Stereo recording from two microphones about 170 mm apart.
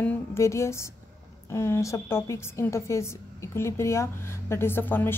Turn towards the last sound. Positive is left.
turn(degrees=10)  # may be behind; listen again after turning